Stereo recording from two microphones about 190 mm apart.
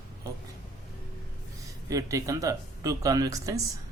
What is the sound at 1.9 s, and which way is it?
A man's voice, 15° right (ahead or behind).